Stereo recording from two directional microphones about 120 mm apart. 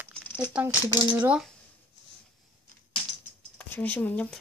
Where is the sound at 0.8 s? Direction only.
30° left (ahead or behind).